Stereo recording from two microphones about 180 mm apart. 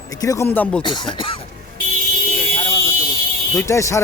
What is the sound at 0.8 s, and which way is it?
Speech, 25° left (ahead or behind).